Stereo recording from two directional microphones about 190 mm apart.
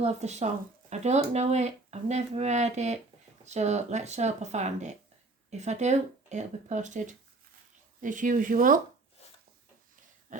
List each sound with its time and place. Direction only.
0.0 s speech: 35° right (ahead or behind)